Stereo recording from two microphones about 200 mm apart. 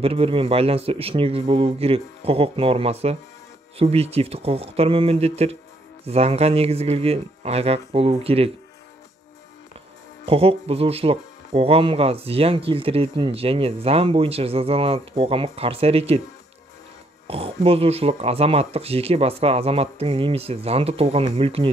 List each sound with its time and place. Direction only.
0.0 s speech: 30° right (ahead or behind)
10.2 s speech: 30° right (ahead or behind)
17.3 s speech: 30° right (ahead or behind)